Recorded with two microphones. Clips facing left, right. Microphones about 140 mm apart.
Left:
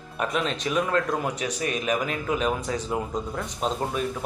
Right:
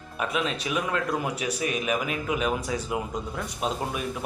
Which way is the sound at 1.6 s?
40° left (ahead or behind).